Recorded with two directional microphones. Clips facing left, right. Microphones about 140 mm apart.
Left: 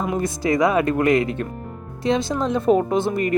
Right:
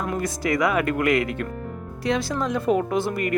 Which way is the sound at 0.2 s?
25° left (ahead or behind).